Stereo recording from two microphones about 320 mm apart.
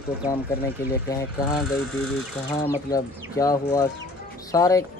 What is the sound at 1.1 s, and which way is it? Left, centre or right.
Speech, centre.